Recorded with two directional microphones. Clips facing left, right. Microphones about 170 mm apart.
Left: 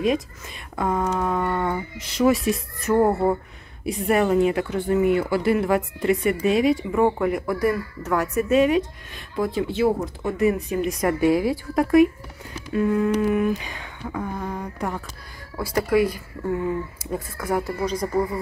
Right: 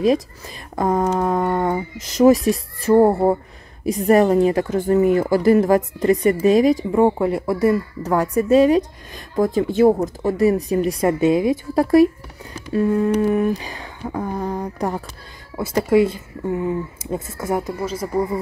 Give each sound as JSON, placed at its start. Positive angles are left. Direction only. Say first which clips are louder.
{"t": 0.7, "sound": "speech", "louder": "right 5 dB", "side_deg": -40}
{"t": 6.9, "sound": "speech", "louder": "right 4 dB", "side_deg": -25}
{"t": 11.7, "sound": "speech", "louder": "right 2 dB", "side_deg": -35}
{"t": 12.5, "sound": "a sound", "louder": "right 3 dB", "side_deg": -35}
{"t": 13.1, "sound": "speech", "louder": "right 3 dB", "side_deg": -35}
{"t": 15.5, "sound": "speech", "louder": "right 4 dB", "side_deg": -25}
{"t": 17.8, "sound": "speech", "louder": "right 1 dB", "side_deg": -5}